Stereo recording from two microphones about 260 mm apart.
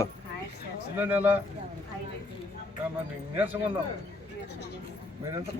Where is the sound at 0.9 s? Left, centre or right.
Centre.